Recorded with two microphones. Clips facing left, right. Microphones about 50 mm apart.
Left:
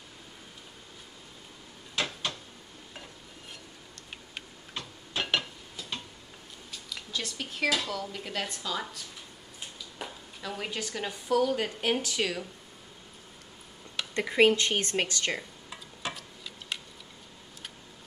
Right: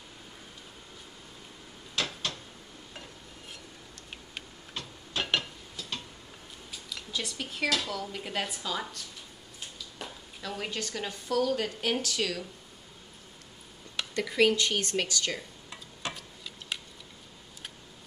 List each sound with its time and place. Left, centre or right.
2.0 s a sound: centre
5.1 s a sound: centre
5.8 s tick-tock: centre
7.1 s speech: centre
9.6 s a woman's voice: centre
14.1 s a woman's voice: left
15.7 s tick-tock: centre